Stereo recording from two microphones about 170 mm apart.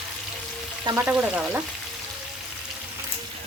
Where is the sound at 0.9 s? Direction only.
10° right (ahead or behind).